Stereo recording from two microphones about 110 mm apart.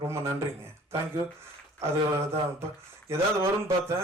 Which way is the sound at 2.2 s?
25° right (ahead or behind).